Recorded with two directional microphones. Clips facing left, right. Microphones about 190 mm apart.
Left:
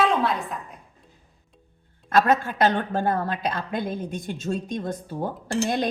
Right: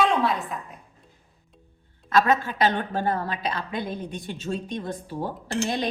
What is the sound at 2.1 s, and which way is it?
A woman's voice, 50° left (ahead or behind).